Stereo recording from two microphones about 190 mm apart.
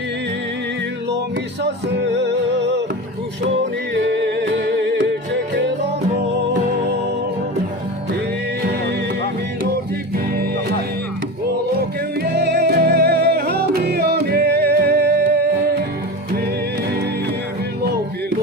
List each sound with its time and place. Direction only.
1.6 s music: 65° right (ahead or behind)
3.9 s music: 65° right (ahead or behind)
12.2 s music: 55° right (ahead or behind)